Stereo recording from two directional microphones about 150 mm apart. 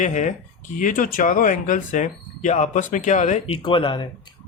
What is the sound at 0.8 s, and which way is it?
Speech, 65° left (ahead or behind).